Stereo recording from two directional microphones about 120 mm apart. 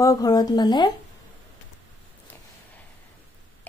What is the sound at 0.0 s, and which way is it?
Speech, 30° left (ahead or behind).